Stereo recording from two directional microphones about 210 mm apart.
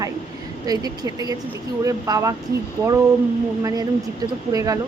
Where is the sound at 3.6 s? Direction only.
20° right (ahead or behind).